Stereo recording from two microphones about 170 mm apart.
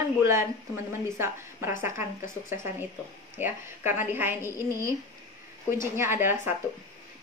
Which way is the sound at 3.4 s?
10° right (ahead or behind).